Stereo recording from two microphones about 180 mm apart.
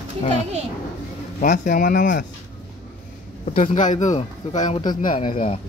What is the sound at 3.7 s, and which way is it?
A man's voice, 45° left (ahead or behind).